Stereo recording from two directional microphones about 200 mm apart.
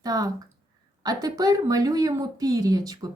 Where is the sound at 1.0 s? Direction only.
20° right (ahead or behind).